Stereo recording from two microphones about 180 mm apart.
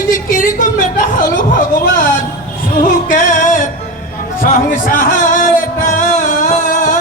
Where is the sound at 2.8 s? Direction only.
45° left (ahead or behind).